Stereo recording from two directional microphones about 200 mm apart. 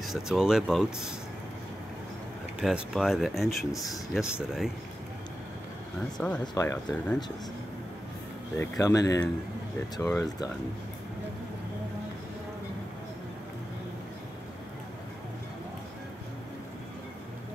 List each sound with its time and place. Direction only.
0.0 s speech: centre (ahead or behind)
2.6 s speech: 5° right (ahead or behind)
6.4 s speech: 15° left (ahead or behind)
8.5 s speech: 15° left (ahead or behind)